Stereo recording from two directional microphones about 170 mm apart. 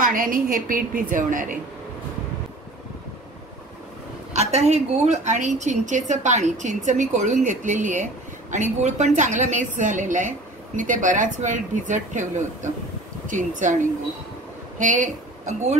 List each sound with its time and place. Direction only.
0.0 s a woman's voice: 55° right (ahead or behind)
4.3 s a woman's voice: 40° right (ahead or behind)
14.8 s speech: 45° right (ahead or behind)